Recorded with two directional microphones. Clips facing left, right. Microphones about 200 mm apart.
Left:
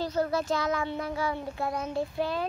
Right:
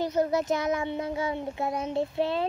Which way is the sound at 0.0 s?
20° right (ahead or behind).